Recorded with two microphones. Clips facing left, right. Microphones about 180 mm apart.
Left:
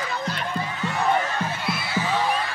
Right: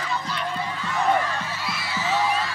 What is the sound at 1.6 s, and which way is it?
Music, 55° left (ahead or behind).